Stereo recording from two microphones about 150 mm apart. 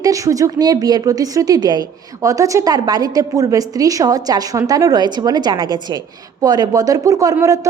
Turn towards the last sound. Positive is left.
turn(degrees=-20)  # may be behind; listen again after turning